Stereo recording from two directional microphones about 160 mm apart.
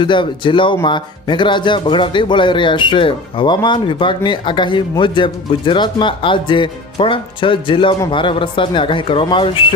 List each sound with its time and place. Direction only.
0.0 s speech: 30° left (ahead or behind)